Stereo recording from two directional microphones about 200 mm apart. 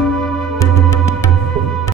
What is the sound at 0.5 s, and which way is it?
Music, 15° left (ahead or behind).